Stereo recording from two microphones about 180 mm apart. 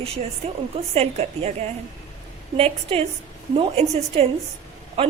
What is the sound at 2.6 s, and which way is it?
Speech, 35° right (ahead or behind).